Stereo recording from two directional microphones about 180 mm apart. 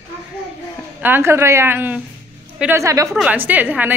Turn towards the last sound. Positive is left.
turn(degrees=-10)  # may be behind; listen again after turning